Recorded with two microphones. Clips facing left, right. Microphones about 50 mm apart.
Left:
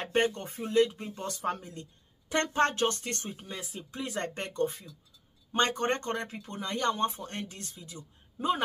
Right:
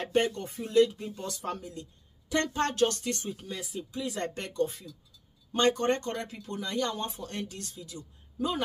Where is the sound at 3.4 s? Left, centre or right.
Left.